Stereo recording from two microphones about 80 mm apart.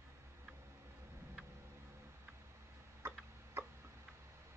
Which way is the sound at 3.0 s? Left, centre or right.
Right.